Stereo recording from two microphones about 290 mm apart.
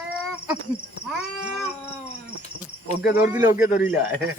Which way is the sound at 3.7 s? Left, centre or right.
Left.